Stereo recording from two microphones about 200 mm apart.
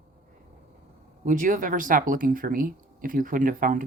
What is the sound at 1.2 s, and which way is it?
Speech, 40° right (ahead or behind).